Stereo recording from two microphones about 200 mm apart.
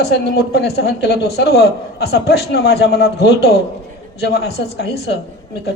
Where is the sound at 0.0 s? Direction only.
55° left (ahead or behind).